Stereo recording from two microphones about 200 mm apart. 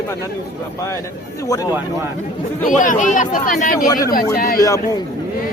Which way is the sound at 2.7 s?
40° left (ahead or behind).